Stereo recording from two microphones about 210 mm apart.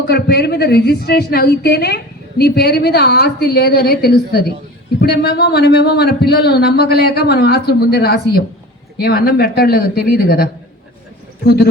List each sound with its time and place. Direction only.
0.1 s speech: 50° left (ahead or behind)